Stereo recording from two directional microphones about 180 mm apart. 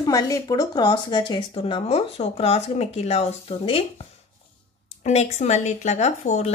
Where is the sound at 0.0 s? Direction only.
20° left (ahead or behind).